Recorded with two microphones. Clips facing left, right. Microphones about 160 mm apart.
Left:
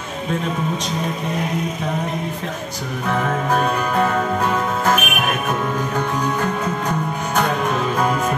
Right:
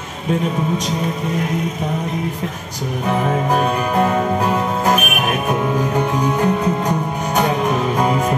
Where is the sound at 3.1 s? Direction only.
15° right (ahead or behind).